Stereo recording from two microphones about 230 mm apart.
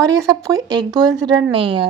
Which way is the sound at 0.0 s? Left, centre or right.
Centre.